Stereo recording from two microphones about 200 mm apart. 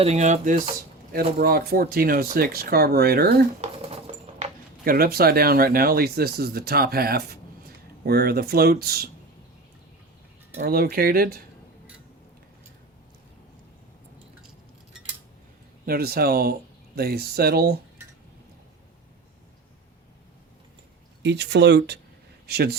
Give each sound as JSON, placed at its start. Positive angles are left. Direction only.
{"t": 0.0, "sound": "speech", "side_deg": -35}
{"t": 1.1, "sound": "speech", "side_deg": -50}
{"t": 3.6, "sound": "a sound", "side_deg": -30}
{"t": 4.9, "sound": "speech", "side_deg": -50}
{"t": 10.6, "sound": "speech", "side_deg": -50}
{"t": 15.9, "sound": "speech", "side_deg": -50}
{"t": 21.2, "sound": "speech", "side_deg": -60}